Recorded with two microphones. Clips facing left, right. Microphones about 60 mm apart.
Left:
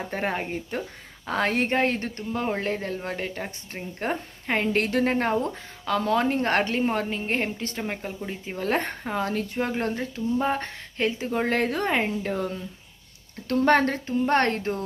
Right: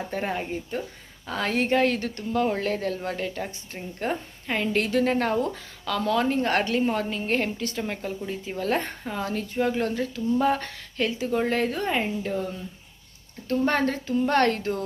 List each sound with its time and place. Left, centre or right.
0.1 s a woman's voice: left
5.1 s speech: left
8.5 s a woman's voice: left
14.1 s speech: left